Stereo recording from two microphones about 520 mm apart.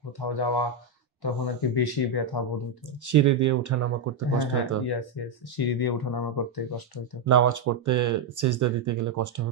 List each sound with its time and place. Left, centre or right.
0.3 s speech: left
3.1 s speech: right
5.6 s speech: left
7.2 s speech: right